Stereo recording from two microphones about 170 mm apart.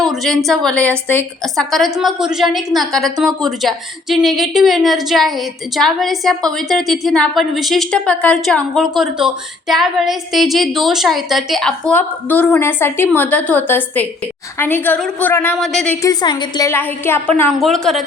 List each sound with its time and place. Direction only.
0.0 s a woman's voice: centre (ahead or behind)
16.0 s a woman's voice: 25° left (ahead or behind)
17.6 s a woman's voice: centre (ahead or behind)